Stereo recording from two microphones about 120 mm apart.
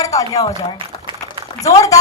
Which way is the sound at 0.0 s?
30° left (ahead or behind).